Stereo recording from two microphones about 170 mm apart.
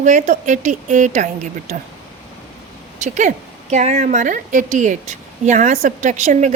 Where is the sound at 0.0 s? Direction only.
45° right (ahead or behind).